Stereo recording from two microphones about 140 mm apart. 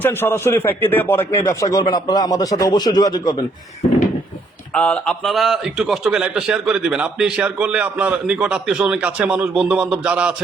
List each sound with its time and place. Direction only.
0.0 s a man's voice: 15° left (ahead or behind)
4.7 s a man's voice: 10° left (ahead or behind); by 10.3 s 10° right (ahead or behind)